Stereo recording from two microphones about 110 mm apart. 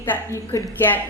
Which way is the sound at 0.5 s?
30° left (ahead or behind).